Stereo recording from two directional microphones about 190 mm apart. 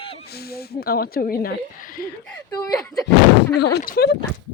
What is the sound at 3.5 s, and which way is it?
Speech, 60° left (ahead or behind).